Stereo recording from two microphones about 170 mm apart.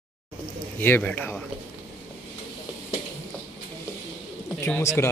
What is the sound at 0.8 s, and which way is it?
Speech, 10° left (ahead or behind).